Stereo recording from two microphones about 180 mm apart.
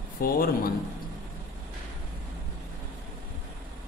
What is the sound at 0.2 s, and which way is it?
Speech, 55° left (ahead or behind).